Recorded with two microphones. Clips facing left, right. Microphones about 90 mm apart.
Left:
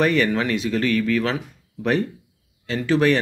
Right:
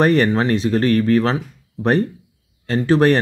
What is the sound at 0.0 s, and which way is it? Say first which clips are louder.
Speech: right 4 dB; 40° right (ahead or behind).